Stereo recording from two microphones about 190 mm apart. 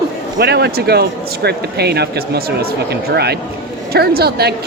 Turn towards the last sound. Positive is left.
turn(degrees=-55)  # may be behind; listen again after turning